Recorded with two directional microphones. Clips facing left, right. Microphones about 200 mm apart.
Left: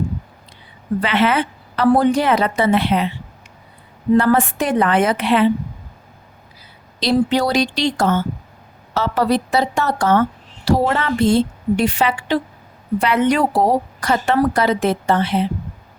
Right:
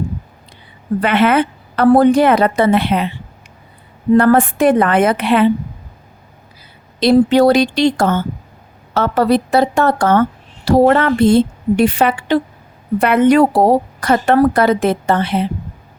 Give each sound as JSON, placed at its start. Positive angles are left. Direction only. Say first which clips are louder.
{"t": 1.0, "sound": "a woman's voice", "louder": "right 5 dB", "side_deg": -55}
{"t": 4.2, "sound": "a woman's voice", "louder": "right 5 dB", "side_deg": -55}
{"t": 7.0, "sound": "a woman's voice", "louder": "right 7 dB", "side_deg": -55}